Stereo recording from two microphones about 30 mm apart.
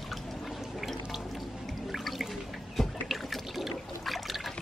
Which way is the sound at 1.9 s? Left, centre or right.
Centre.